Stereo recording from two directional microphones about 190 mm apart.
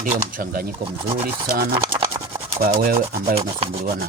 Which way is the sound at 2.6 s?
45° right (ahead or behind).